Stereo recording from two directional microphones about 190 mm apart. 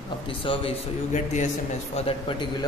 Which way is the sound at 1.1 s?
40° left (ahead or behind).